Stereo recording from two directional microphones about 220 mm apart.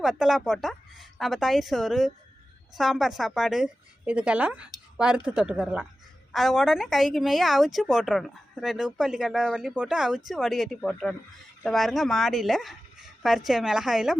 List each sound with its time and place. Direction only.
0.0 s a woman's voice: centre (ahead or behind)